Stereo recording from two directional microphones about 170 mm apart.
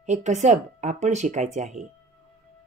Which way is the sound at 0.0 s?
45° right (ahead or behind).